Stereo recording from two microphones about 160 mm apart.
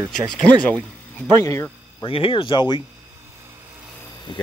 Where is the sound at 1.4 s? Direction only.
20° left (ahead or behind).